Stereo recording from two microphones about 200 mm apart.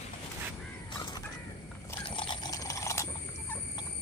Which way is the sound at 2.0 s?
25° left (ahead or behind).